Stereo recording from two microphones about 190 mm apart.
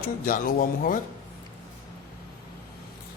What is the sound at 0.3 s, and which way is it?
Speech, 45° left (ahead or behind).